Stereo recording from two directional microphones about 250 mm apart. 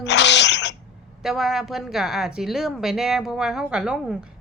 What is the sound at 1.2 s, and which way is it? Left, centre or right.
A woman's voice, centre.